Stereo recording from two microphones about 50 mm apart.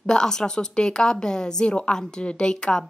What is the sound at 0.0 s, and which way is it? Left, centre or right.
Speech, centre.